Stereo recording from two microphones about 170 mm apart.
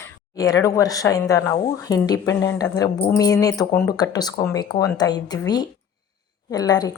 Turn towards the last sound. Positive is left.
turn(degrees=25)  # may be behind; listen again after turning